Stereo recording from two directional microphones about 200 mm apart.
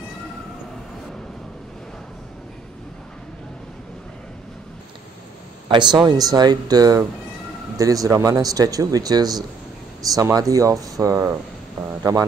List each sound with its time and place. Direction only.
5.7 s speech: 20° right (ahead or behind)